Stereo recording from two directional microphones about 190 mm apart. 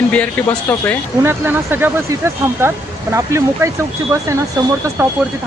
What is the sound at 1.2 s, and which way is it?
Speech, 10° right (ahead or behind).